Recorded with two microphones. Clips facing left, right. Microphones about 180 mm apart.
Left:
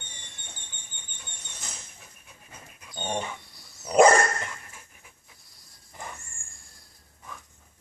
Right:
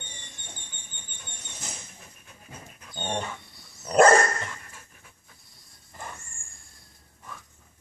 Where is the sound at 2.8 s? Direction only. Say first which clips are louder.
Even; 5° left (ahead or behind).